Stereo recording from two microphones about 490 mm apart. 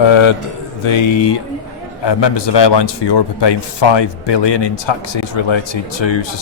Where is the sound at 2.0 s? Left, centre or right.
Left.